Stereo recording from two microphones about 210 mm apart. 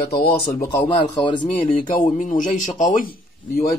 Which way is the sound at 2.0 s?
40° left (ahead or behind).